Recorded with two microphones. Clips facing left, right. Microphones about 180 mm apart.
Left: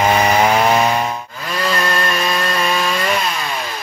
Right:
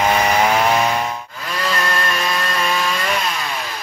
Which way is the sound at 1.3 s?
5° left (ahead or behind).